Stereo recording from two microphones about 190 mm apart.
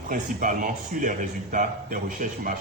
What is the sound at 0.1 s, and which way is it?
A man's voice, 45° right (ahead or behind).